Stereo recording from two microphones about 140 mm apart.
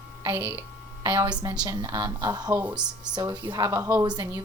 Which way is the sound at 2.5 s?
15° right (ahead or behind).